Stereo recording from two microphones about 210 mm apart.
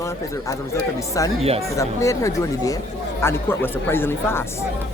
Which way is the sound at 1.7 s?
15° left (ahead or behind).